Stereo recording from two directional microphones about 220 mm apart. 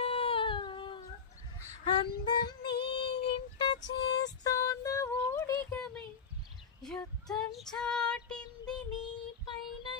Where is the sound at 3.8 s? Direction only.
50° left (ahead or behind).